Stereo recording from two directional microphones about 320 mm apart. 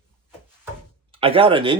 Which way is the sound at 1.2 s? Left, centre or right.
Centre.